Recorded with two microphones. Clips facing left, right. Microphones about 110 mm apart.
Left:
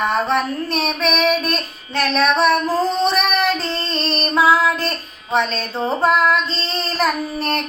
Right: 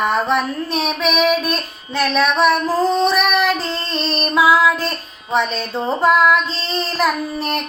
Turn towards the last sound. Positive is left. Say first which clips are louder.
# even
turn(degrees=-5)  # may be behind; listen again after turning